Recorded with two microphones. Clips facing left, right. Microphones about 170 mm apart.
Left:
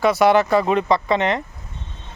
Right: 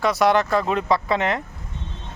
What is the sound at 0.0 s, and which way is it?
Speech, centre (ahead or behind).